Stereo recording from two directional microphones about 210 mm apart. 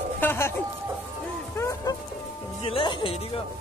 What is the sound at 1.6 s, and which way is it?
Music, 15° left (ahead or behind).